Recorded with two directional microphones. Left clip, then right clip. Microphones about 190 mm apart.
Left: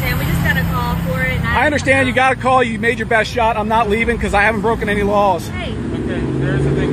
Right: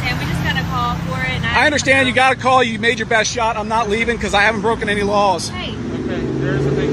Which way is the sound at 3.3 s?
15° left (ahead or behind).